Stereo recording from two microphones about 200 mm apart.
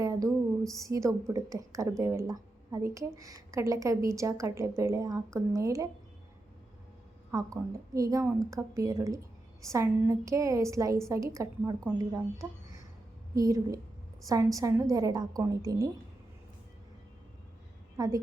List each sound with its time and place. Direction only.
0.0 s a sound: 15° right (ahead or behind)
0.8 s a woman's voice: 15° right (ahead or behind)
7.3 s a woman's voice: 15° right (ahead or behind)
17.9 s a woman's voice: 15° right (ahead or behind)